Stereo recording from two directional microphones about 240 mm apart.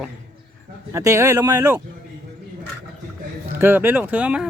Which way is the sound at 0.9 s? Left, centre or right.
Centre.